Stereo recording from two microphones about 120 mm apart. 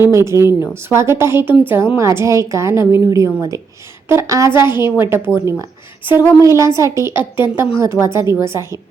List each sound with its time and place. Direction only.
0.0 s a woman's voice: 20° right (ahead or behind)